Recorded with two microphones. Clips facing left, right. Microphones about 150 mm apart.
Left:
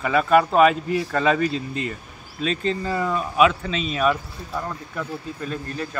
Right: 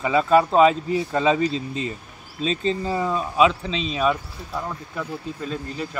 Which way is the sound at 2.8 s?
20° right (ahead or behind).